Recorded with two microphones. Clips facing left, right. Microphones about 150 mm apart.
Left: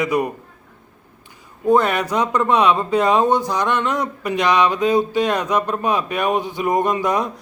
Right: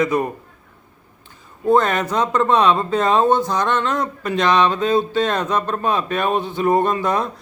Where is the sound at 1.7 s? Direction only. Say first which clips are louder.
Even; 10° left (ahead or behind).